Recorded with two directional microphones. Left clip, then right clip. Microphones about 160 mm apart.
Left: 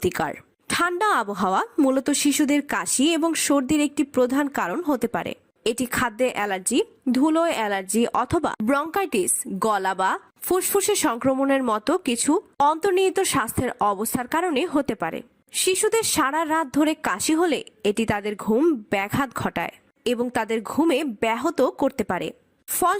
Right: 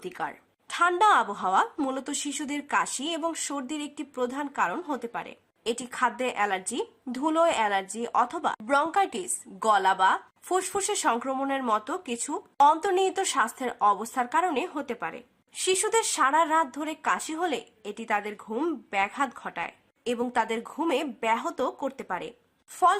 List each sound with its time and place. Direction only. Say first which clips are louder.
0.0 s a woman's voice: left 9 dB; 40° left (ahead or behind)
5.7 s a woman's voice: even; 35° left (ahead or behind)
15.6 s a woman's voice: left 4 dB; 35° left (ahead or behind)
18.5 s speech: left 9 dB; 25° left (ahead or behind)
18.9 s a woman's voice: left 3 dB; 45° left (ahead or behind)
20.1 s a woman's voice: even; 35° left (ahead or behind)